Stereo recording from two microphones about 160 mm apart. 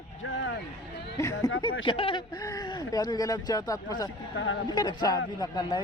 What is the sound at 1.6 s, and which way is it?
Speech, 35° left (ahead or behind).